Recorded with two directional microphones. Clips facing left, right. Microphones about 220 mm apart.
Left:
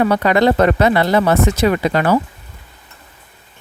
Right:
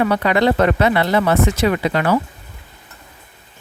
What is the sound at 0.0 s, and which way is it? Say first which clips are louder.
Speech: left 2 dB; 40° left (ahead or behind).